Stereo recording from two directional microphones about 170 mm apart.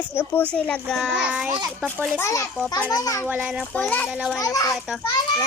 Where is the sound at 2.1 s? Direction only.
15° left (ahead or behind).